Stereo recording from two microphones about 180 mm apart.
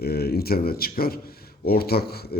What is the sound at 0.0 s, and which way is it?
A man's voice, 60° left (ahead or behind).